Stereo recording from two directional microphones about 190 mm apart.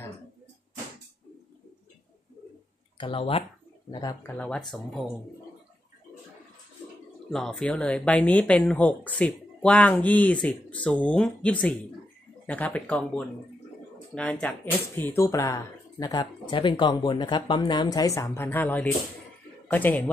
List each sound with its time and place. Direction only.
3.0 s speech: 25° left (ahead or behind)
4.3 s speech: 5° left (ahead or behind)
7.2 s speech: centre (ahead or behind)